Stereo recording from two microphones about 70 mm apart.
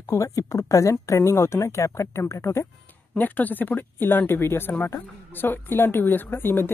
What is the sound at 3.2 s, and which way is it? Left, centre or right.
Speech, left.